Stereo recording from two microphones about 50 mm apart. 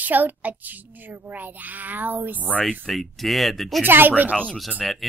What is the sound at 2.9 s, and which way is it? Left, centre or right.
Speech, centre.